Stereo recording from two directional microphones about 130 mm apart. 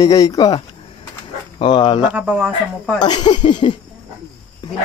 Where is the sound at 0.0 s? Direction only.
25° left (ahead or behind).